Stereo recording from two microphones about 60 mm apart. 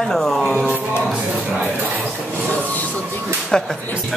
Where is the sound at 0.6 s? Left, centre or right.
Left.